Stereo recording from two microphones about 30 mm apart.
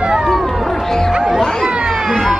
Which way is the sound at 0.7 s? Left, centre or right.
Centre.